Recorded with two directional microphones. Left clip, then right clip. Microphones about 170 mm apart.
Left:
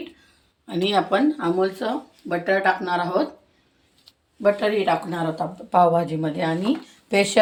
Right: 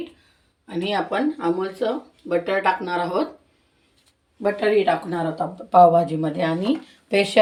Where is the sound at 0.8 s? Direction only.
15° left (ahead or behind).